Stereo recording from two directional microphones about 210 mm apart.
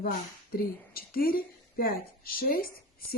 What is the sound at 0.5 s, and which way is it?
A woman's voice, 45° left (ahead or behind).